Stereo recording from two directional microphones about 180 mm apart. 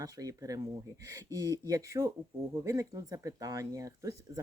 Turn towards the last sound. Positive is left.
turn(degrees=-20)  # may be behind; listen again after turning